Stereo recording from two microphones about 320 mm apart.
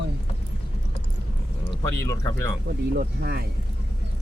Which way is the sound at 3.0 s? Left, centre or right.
Right.